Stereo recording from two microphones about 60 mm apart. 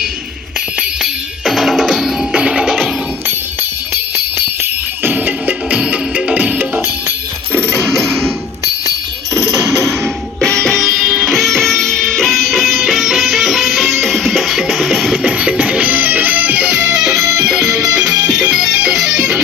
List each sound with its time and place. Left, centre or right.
0.8 s music: centre
5.0 s music: right
7.9 s coin: centre
9.3 s music: right
10.4 s music: centre
10.8 s music: centre
15.2 s music: centre